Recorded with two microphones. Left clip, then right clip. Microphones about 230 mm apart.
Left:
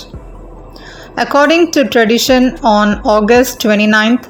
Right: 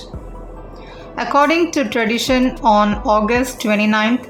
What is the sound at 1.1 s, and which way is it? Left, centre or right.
Speech, left.